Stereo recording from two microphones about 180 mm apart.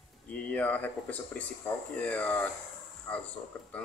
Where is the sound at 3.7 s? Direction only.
5° left (ahead or behind).